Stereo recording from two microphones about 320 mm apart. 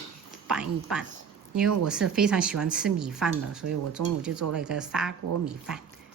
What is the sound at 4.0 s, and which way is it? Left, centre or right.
Speech, right.